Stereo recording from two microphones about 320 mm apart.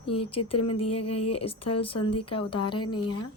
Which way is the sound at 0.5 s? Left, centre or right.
Left.